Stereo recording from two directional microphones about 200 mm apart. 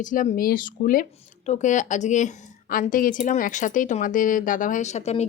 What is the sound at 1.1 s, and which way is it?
Speech, 30° left (ahead or behind).